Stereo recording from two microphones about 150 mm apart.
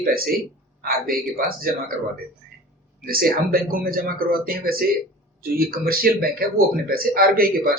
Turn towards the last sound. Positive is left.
turn(degrees=-80)